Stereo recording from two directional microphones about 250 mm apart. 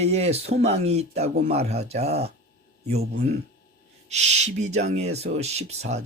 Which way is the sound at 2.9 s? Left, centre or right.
Right.